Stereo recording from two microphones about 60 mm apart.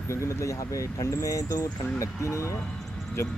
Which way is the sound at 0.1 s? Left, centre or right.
Left.